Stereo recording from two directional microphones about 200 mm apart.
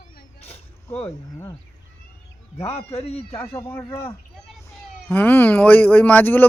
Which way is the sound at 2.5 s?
30° left (ahead or behind).